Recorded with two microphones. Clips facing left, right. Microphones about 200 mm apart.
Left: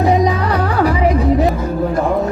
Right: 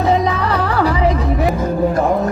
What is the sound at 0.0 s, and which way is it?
Music, 15° left (ahead or behind).